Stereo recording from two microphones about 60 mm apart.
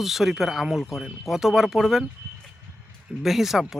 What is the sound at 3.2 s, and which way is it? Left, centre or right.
Speech, centre.